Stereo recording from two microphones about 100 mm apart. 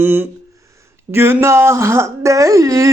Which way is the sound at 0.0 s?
20° right (ahead or behind).